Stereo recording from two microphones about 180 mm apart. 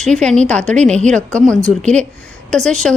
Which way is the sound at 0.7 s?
40° right (ahead or behind).